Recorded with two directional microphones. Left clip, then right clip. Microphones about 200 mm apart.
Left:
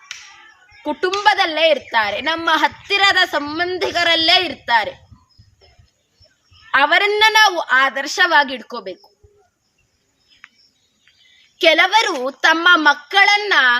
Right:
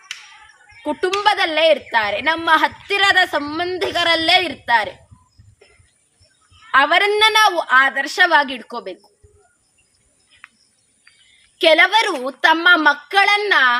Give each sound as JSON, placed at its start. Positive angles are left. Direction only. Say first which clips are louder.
{"t": 0.8, "sound": "a woman's voice", "louder": "even", "side_deg": 10}
{"t": 6.7, "sound": "a woman's voice", "louder": "even", "side_deg": 15}
{"t": 11.5, "sound": "a woman's voice", "louder": "even", "side_deg": 10}